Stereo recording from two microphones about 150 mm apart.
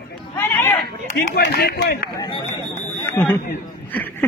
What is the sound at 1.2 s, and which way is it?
Speech, 90° left.